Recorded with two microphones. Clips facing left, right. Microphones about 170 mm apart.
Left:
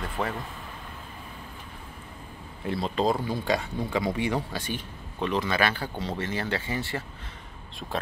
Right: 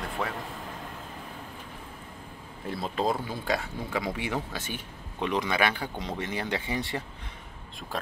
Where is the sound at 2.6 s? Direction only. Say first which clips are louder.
Left 3 dB; centre (ahead or behind); by 7.0 s 20° right (ahead or behind).